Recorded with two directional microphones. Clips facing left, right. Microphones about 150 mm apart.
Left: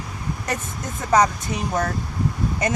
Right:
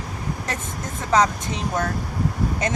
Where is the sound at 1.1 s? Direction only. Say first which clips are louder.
Left 1 dB; 10° left (ahead or behind).